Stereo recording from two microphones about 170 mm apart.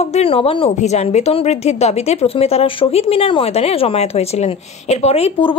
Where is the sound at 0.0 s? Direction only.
35° left (ahead or behind).